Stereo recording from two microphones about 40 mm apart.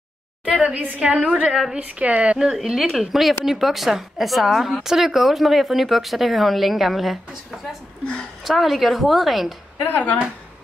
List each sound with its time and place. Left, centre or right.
0.7 s a woman's voice: right
2.5 s speech: centre
8.5 s speech: centre
9.8 s speech: left